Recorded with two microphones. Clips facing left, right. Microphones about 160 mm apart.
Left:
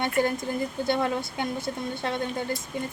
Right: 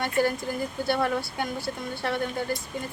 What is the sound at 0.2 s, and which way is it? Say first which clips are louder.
Speech: right 1 dB; 20° left (ahead or behind).